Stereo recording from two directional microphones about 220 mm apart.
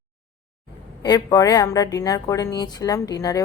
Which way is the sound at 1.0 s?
15° left (ahead or behind).